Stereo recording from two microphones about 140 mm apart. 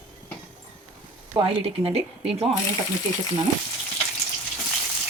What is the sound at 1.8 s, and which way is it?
Speech, 45° right (ahead or behind).